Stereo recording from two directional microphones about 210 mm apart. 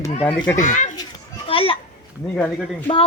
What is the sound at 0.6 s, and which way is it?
Speech, 35° left (ahead or behind).